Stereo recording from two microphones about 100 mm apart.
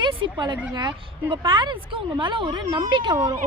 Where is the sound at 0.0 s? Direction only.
55° right (ahead or behind).